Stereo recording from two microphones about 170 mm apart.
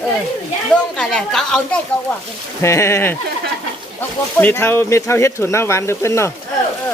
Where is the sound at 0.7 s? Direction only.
5° left (ahead or behind).